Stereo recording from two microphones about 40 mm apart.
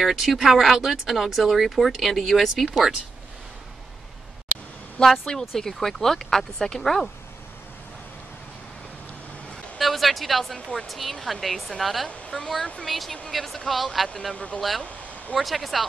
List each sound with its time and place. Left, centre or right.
0.1 s speech: centre
5.0 s speech: left
5.4 s speech: centre
9.8 s speech: centre
12.3 s speech: centre
12.8 s speech: centre
14.3 s speech: left
15.3 s speech: centre